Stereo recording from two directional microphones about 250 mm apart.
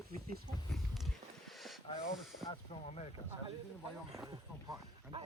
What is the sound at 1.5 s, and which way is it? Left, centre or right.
Speech, centre.